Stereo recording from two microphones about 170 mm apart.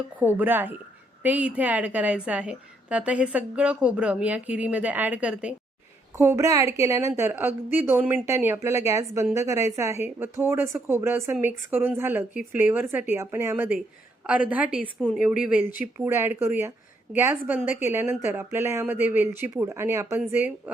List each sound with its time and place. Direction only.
0.2 s speech: 10° right (ahead or behind)
6.1 s speech: 15° right (ahead or behind)
12.3 s speech: 50° left (ahead or behind)
12.5 s speech: 10° right (ahead or behind)